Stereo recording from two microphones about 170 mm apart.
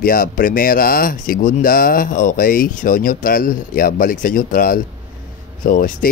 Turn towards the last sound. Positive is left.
turn(degrees=55)  # may be behind; listen again after turning